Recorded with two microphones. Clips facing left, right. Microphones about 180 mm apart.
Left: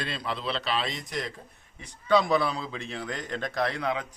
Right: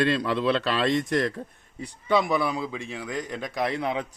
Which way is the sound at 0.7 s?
70° right (ahead or behind).